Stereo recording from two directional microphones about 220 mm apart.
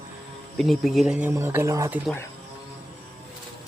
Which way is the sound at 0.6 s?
Centre (ahead or behind).